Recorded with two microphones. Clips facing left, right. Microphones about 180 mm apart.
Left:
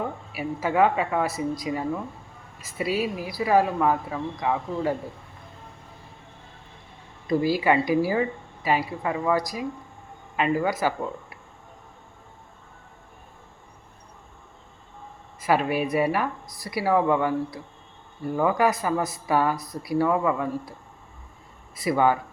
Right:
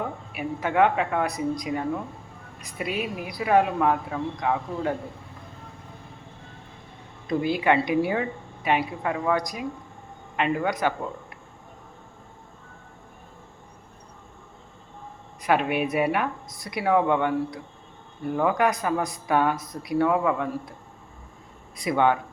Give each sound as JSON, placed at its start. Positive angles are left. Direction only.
{"t": 0.3, "sound": "a woman's voice", "side_deg": 5}
{"t": 2.8, "sound": "a woman's voice", "side_deg": -55}
{"t": 3.2, "sound": "a woman's voice", "side_deg": 0}
{"t": 7.3, "sound": "a woman's voice", "side_deg": 5}
{"t": 15.4, "sound": "a woman's voice", "side_deg": 0}
{"t": 21.8, "sound": "a woman's voice", "side_deg": 5}